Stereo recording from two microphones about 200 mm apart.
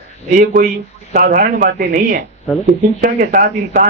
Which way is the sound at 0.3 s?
40° right (ahead or behind).